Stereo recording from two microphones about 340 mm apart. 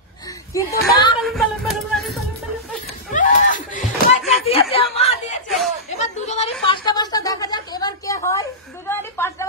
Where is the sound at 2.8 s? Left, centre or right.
Left.